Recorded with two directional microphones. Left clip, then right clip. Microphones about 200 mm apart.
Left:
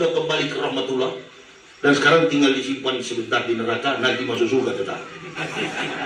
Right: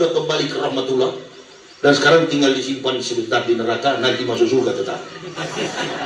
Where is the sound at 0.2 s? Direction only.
30° right (ahead or behind).